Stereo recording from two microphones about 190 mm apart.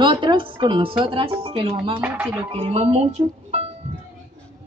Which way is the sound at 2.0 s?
5° right (ahead or behind).